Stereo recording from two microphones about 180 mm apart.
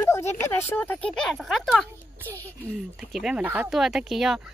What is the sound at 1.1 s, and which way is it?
Speech, centre (ahead or behind).